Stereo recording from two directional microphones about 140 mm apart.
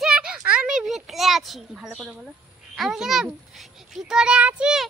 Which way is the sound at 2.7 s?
Centre (ahead or behind).